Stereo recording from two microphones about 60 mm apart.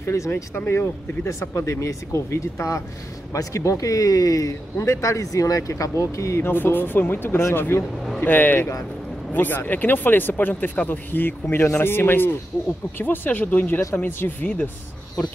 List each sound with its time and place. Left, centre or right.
0.0 s speech: left
0.3 s speech: left
1.5 s speech: left
3.3 s speech: left
6.5 s speech: left
11.4 s speech: left